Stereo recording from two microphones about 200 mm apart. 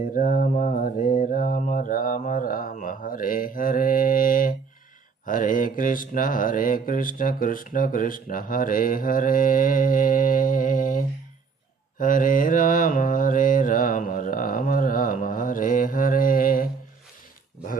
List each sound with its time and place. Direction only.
0.1 s mantra: 40° left (ahead or behind)